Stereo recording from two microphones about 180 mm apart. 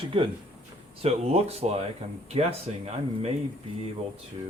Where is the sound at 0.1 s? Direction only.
30° right (ahead or behind).